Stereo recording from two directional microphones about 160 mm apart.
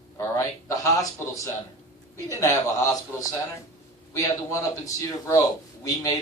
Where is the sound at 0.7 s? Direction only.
20° left (ahead or behind).